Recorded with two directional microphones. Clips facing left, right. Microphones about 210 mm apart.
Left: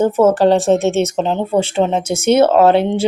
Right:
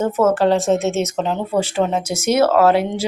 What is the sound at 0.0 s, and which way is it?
Speech, 30° left (ahead or behind).